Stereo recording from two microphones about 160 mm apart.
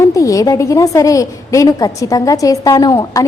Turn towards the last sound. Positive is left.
turn(degrees=20)  # may be behind; listen again after turning